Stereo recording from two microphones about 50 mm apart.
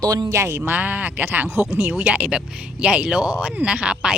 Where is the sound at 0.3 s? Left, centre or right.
Right.